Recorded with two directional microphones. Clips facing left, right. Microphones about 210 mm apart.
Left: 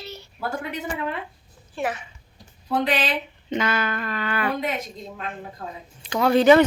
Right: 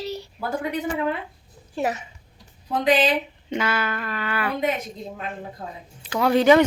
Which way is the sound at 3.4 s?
10° right (ahead or behind).